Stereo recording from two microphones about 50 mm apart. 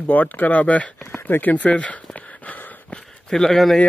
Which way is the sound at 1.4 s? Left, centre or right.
Left.